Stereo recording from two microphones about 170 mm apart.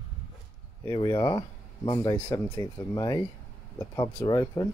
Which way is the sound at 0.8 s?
25° left (ahead or behind).